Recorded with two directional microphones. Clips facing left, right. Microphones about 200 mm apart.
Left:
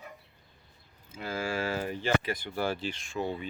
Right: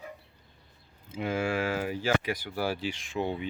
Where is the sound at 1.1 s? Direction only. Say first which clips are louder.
Right 4 dB; 20° right (ahead or behind).